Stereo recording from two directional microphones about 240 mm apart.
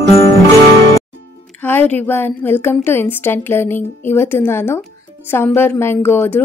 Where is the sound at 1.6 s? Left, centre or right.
Centre.